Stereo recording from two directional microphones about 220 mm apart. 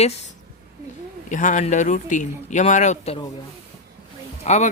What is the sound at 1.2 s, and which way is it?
Speech, 35° left (ahead or behind).